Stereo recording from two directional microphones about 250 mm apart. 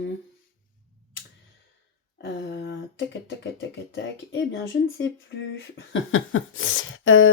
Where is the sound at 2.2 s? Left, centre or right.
Left.